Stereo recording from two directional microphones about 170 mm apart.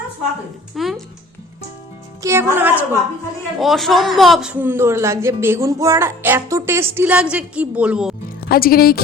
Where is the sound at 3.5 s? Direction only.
Centre (ahead or behind).